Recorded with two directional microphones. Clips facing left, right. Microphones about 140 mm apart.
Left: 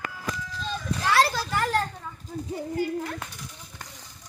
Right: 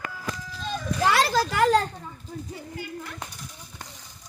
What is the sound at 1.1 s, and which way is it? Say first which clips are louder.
Speech: left 2 dB; 90° right.